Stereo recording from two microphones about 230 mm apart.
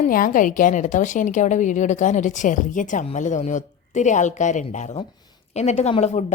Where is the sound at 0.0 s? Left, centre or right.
Left.